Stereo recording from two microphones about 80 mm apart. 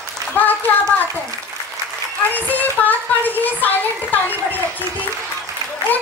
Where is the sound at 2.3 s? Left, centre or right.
Left.